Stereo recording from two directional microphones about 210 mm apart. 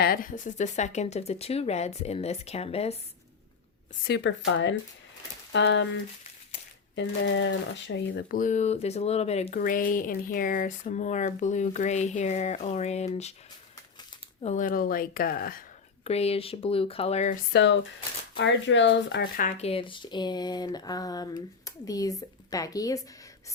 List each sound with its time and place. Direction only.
0.0 s speech: 45° left (ahead or behind)
4.0 s speech: 55° left (ahead or behind)
6.9 s speech: 60° left (ahead or behind)
8.4 s speech: 35° left (ahead or behind)
14.4 s speech: 35° left (ahead or behind)
16.0 s speech: 30° left (ahead or behind)
17.5 s a woman's voice: 60° left (ahead or behind); by 23.0 s 15° left (ahead or behind)